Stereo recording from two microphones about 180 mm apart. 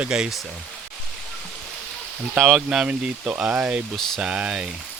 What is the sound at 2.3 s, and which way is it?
Speech, centre (ahead or behind).